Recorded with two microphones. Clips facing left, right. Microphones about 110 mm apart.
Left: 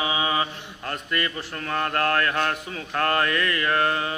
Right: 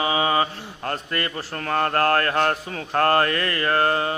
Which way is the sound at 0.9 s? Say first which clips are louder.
Even; 35° right (ahead or behind).